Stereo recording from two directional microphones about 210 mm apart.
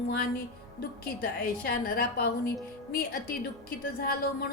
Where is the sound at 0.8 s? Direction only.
45° left (ahead or behind).